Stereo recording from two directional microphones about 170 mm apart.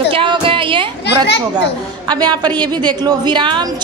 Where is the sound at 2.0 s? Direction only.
25° right (ahead or behind).